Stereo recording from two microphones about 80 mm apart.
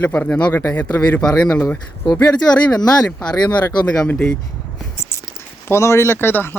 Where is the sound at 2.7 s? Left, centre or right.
Left.